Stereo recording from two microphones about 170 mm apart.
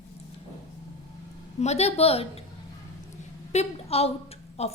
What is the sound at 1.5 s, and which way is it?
Speech, 40° left (ahead or behind).